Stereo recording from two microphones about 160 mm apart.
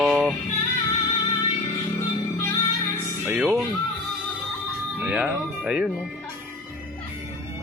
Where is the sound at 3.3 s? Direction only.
10° right (ahead or behind).